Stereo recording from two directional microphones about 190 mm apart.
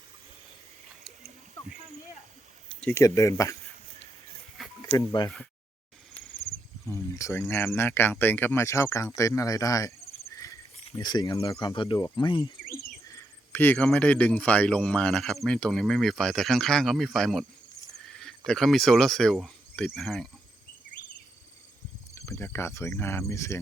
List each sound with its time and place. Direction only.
2.8 s speech: 15° left (ahead or behind)
4.9 s insect: 20° left (ahead or behind)
6.8 s speech: 15° left (ahead or behind)
11.0 s insect: 20° left (ahead or behind)
13.1 s speech: 15° left (ahead or behind)
22.1 s speech: 15° left (ahead or behind)